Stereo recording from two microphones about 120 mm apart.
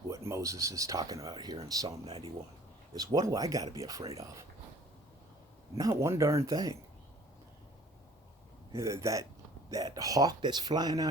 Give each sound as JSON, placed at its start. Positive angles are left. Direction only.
{"t": 0.1, "sound": "speech", "side_deg": -25}
{"t": 2.0, "sound": "speech", "side_deg": -60}
{"t": 2.9, "sound": "speech", "side_deg": -30}
{"t": 5.7, "sound": "speech", "side_deg": -30}
{"t": 8.7, "sound": "speech", "side_deg": -25}